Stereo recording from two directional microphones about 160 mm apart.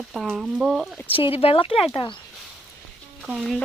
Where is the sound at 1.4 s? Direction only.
35° left (ahead or behind).